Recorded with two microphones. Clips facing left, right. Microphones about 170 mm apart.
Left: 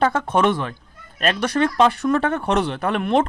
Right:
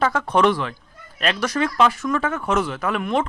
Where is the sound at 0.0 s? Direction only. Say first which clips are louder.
Even; 25° left (ahead or behind).